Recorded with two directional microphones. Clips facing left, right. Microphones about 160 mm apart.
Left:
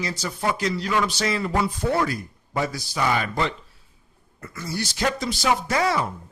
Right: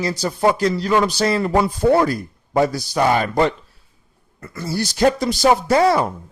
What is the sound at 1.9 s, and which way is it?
A man's voice, 40° right (ahead or behind).